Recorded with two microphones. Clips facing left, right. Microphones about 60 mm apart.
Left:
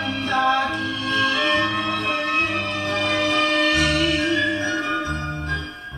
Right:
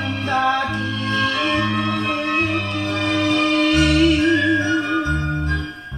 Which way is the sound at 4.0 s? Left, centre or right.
Left.